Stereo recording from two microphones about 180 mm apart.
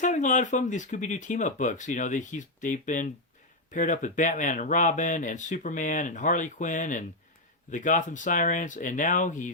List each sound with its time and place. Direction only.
0.0 s speech: 45° left (ahead or behind)